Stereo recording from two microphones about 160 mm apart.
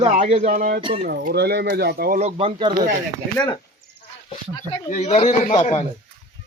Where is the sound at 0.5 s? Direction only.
55° right (ahead or behind).